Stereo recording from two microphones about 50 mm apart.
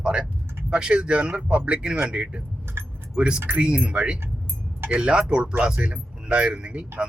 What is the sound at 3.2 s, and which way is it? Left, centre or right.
Speech, centre.